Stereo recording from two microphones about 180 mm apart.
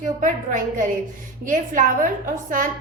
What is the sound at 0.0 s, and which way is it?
A woman's voice, 45° right (ahead or behind).